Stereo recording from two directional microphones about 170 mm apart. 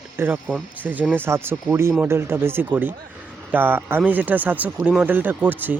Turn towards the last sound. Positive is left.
turn(degrees=-10)  # may be behind; listen again after turning